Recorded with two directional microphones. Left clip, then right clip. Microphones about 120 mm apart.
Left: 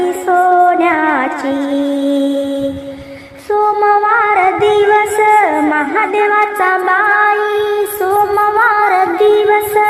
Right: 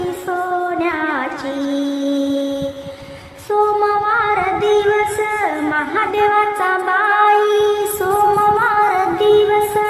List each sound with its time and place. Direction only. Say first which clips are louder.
0.0 s music: left 9 dB; 40° left (ahead or behind)
3.5 s music: left 4 dB; 25° left (ahead or behind)